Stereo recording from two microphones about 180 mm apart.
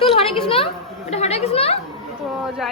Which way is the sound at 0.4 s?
30° left (ahead or behind).